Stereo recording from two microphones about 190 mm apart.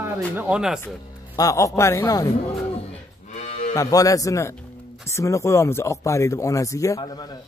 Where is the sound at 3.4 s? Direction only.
40° left (ahead or behind).